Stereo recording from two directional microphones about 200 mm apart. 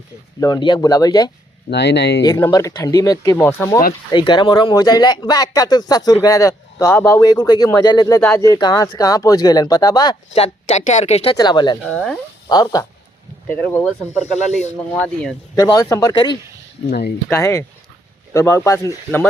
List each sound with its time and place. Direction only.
0.3 s speech: 20° left (ahead or behind)
1.7 s speech: 60° left (ahead or behind)
2.2 s speech: 15° left (ahead or behind)
4.1 s speech: 25° left (ahead or behind)
10.3 s speech: 30° left (ahead or behind)
11.9 s speech: centre (ahead or behind)
12.5 s speech: 20° left (ahead or behind)
14.2 s speech: 35° left (ahead or behind)
14.8 s speech: 5° left (ahead or behind)
15.5 s speech: 15° left (ahead or behind)
16.9 s speech: 55° left (ahead or behind)
17.2 s speech: 15° left (ahead or behind)